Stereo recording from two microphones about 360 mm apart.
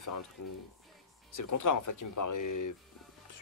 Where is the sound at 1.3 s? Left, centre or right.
Left.